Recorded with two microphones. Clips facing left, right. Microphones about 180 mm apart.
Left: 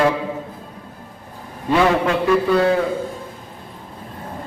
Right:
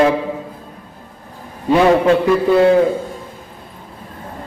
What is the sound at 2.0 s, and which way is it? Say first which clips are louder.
Speech: right 4 dB; 25° right (ahead or behind).